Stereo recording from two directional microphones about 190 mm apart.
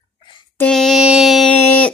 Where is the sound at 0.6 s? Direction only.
5° left (ahead or behind).